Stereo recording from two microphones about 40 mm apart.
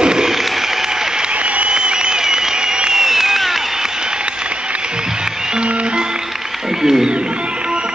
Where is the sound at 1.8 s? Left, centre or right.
Right; by 3.9 s centre.